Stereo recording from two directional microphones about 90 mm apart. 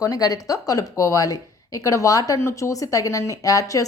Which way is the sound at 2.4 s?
30° left (ahead or behind).